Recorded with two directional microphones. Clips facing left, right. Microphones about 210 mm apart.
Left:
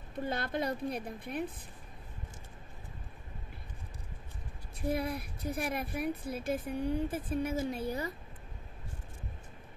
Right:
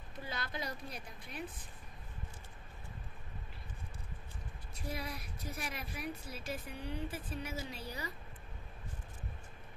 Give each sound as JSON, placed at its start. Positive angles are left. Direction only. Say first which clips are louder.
{"t": 0.2, "sound": "a woman's voice", "louder": "left 9 dB", "side_deg": 55}
{"t": 4.8, "sound": "speech", "louder": "left 9 dB", "side_deg": 55}